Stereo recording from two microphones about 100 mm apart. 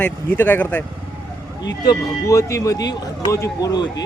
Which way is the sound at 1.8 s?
35° left (ahead or behind).